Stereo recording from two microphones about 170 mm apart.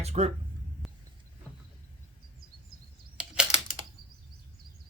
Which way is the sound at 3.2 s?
5° right (ahead or behind).